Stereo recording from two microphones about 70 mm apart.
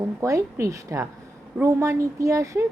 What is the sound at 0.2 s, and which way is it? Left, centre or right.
A woman's voice, right.